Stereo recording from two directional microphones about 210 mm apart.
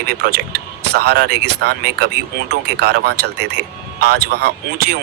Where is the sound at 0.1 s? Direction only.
50° right (ahead or behind).